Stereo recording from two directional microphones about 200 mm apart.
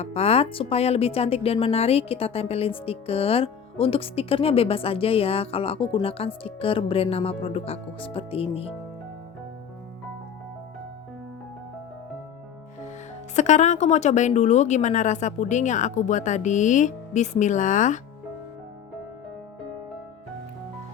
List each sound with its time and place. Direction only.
0.0 s speech: 30° left (ahead or behind)
13.3 s speech: 35° left (ahead or behind)